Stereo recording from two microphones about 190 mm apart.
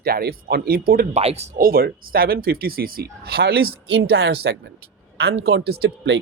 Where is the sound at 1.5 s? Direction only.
50° right (ahead or behind).